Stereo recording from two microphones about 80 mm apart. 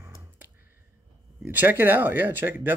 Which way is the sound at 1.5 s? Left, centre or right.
Right.